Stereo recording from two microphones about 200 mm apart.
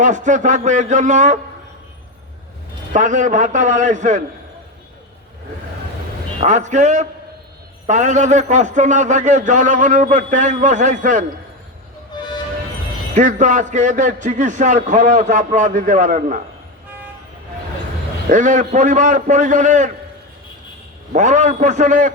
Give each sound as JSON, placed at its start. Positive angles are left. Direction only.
{"t": 0.0, "sound": "a man's voice", "side_deg": -40}
{"t": 2.9, "sound": "a man's voice", "side_deg": -40}
{"t": 6.4, "sound": "a man's voice", "side_deg": -35}
{"t": 12.1, "sound": "music", "side_deg": 20}
{"t": 13.1, "sound": "a man's voice", "side_deg": -40}
{"t": 18.3, "sound": "a man's voice", "side_deg": -40}
{"t": 21.1, "sound": "a man's voice", "side_deg": -35}